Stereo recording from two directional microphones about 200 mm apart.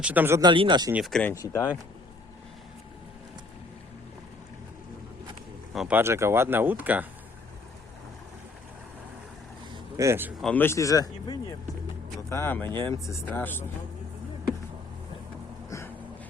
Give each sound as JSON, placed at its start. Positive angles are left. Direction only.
{"t": 0.0, "sound": "speech", "side_deg": -10}
{"t": 0.5, "sound": "speech", "side_deg": -25}
{"t": 0.9, "sound": "speech", "side_deg": 0}
{"t": 1.3, "sound": "a man's voice", "side_deg": 15}
{"t": 5.7, "sound": "speech", "side_deg": 0}
{"t": 6.0, "sound": "speech", "side_deg": -15}
{"t": 10.0, "sound": "speech", "side_deg": -10}
{"t": 10.4, "sound": "a man's voice", "side_deg": 10}